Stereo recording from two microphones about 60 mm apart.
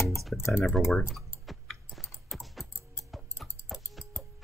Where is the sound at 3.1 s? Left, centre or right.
Centre.